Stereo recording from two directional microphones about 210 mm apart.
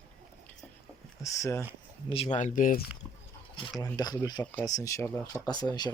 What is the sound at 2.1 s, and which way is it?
Speech, 30° left (ahead or behind).